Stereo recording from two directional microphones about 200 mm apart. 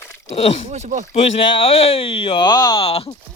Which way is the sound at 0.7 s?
35° right (ahead or behind).